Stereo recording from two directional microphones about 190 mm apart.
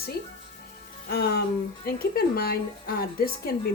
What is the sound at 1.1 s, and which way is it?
Speech, 55° left (ahead or behind).